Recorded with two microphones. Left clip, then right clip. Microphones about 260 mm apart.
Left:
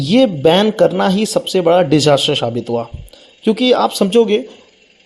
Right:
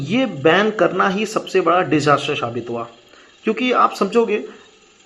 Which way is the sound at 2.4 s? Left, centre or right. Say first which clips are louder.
Left 6 dB; left.